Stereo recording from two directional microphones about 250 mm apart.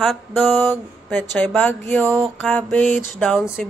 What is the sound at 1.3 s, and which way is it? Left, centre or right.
Speech, centre.